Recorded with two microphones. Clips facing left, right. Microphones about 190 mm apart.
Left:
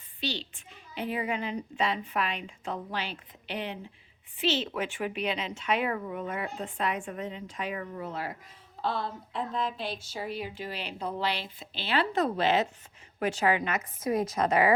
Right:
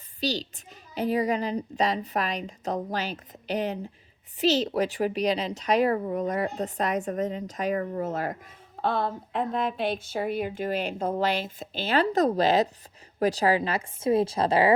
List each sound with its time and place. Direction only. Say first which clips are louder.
0.2 s a woman's voice: right 6 dB; 40° right (ahead or behind)